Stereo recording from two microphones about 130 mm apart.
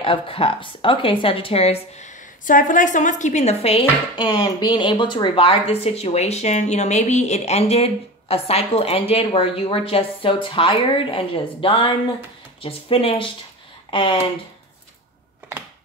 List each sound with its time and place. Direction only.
0.0 s speech: 45° left (ahead or behind)
4.1 s speech: 35° left (ahead or behind)